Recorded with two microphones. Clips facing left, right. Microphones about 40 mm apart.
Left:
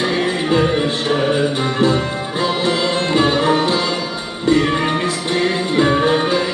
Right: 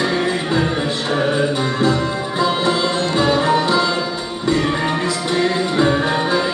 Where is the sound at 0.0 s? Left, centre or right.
Left.